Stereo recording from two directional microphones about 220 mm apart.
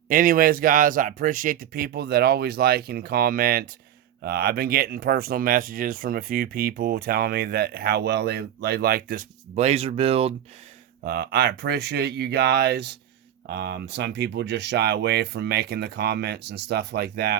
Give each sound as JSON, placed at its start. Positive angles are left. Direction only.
{"t": 0.1, "sound": "speech", "side_deg": -40}
{"t": 11.0, "sound": "speech", "side_deg": -45}